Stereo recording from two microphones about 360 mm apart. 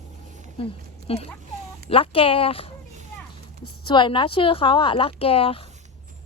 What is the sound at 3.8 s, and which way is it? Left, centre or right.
A woman's voice, centre.